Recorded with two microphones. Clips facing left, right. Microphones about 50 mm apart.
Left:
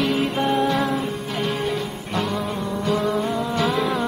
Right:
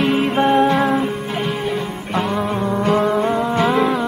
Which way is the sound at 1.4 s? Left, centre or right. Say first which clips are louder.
Right 1 dB; centre.